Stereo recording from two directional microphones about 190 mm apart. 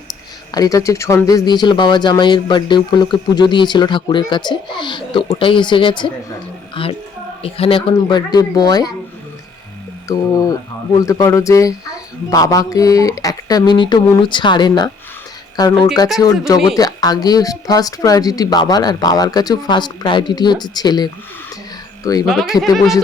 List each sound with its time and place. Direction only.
0.5 s speech: 20° left (ahead or behind)
7.4 s speech: 30° left (ahead or behind)
10.1 s speech: 15° left (ahead or behind)
22.3 s speech: centre (ahead or behind)